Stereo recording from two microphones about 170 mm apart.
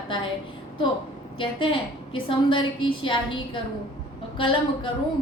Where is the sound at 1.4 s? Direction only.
30° left (ahead or behind).